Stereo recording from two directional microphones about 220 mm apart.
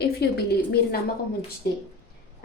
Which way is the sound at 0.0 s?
45° left (ahead or behind).